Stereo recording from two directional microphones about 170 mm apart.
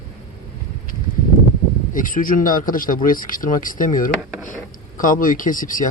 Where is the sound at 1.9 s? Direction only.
55° left (ahead or behind).